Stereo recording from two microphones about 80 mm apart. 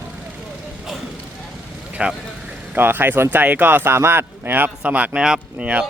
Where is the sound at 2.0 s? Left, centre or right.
Centre.